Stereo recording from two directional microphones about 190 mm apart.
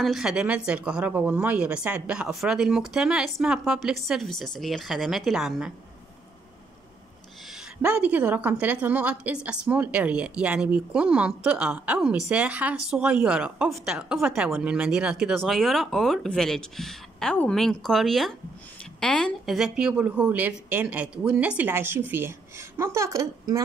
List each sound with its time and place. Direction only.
0.0 s a woman's voice: centre (ahead or behind)
7.8 s a woman's voice: 10° right (ahead or behind)